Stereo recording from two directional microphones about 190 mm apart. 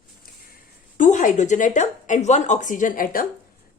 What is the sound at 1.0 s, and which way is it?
A woman's voice, 40° left (ahead or behind).